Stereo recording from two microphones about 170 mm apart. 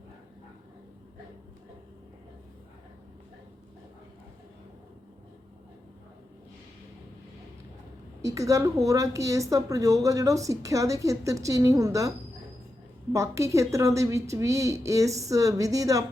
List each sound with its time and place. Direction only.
8.2 s a woman's voice: 20° right (ahead or behind)
13.1 s a woman's voice: 15° right (ahead or behind)